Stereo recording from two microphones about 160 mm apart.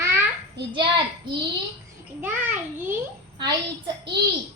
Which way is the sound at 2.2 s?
15° right (ahead or behind).